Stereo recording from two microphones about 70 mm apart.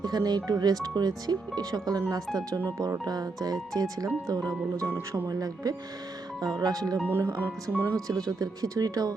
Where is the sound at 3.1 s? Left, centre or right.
Right.